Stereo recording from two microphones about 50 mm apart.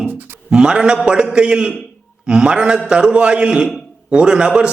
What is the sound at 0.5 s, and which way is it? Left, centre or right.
A man's voice, centre.